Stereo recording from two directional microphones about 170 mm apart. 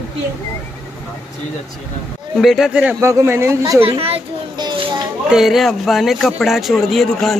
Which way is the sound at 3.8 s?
35° right (ahead or behind).